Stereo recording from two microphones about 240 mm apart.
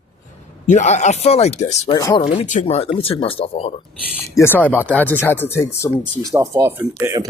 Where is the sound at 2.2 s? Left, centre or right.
Left.